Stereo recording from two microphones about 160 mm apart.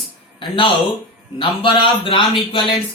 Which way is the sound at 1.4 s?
30° left (ahead or behind).